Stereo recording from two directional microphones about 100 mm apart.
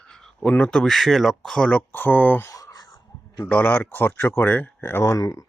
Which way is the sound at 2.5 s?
35° left (ahead or behind).